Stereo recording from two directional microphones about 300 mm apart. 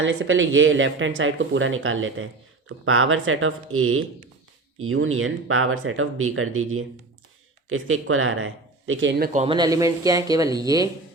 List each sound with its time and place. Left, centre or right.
0.0 s speech: right; by 10.8 s centre